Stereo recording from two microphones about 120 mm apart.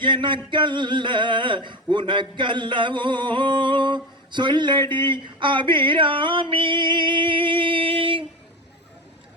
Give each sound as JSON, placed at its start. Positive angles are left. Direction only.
{"t": 0.0, "sound": "speech", "side_deg": -40}